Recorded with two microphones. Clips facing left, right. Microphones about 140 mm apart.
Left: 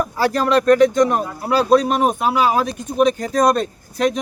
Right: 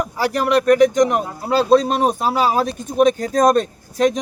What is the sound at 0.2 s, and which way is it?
Speech, 15° right (ahead or behind).